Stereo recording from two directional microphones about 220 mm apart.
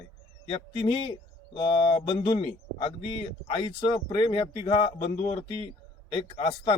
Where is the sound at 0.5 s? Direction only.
25° left (ahead or behind).